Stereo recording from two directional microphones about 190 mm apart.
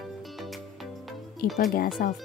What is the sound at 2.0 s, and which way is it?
Speech, 50° left (ahead or behind).